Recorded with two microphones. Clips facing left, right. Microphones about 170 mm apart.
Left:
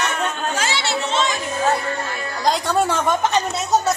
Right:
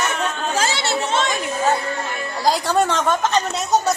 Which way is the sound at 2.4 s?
Centre (ahead or behind).